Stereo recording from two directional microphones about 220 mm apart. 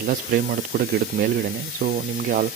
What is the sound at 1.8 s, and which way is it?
Speech, 40° right (ahead or behind).